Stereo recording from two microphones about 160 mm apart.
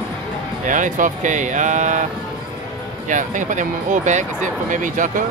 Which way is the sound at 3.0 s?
50° right (ahead or behind).